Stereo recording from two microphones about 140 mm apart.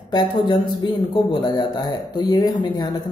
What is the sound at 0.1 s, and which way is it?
Speech, 30° left (ahead or behind).